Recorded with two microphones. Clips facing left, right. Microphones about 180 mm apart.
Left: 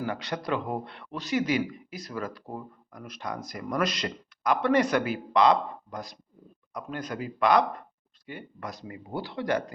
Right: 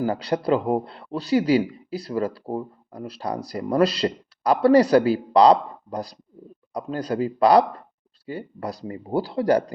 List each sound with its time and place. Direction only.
0.0 s speech: 35° right (ahead or behind)